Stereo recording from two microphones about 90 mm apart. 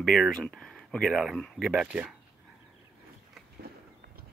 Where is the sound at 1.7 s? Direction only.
10° right (ahead or behind).